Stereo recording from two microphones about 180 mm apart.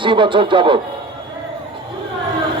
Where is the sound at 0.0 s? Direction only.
25° right (ahead or behind).